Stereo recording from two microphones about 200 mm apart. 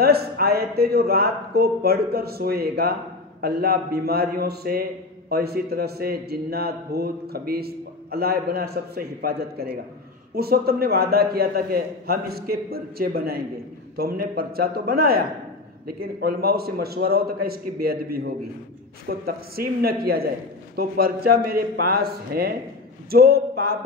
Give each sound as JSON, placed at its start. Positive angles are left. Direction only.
{"t": 0.0, "sound": "a man's voice", "side_deg": -50}